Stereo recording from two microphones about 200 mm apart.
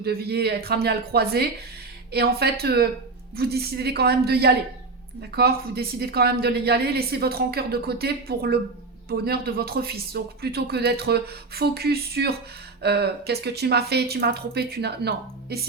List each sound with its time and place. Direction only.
0.0 s speech: 50° right (ahead or behind)